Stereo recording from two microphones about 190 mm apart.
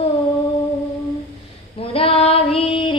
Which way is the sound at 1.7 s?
30° left (ahead or behind).